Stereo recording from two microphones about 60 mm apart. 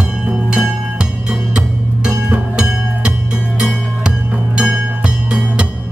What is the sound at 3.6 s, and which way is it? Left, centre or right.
Music, centre.